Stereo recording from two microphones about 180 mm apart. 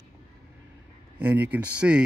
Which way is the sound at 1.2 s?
10° right (ahead or behind).